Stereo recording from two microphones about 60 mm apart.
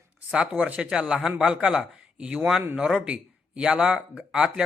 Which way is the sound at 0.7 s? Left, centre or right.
Centre.